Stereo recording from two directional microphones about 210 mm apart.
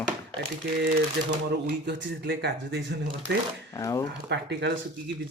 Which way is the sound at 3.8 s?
15° left (ahead or behind).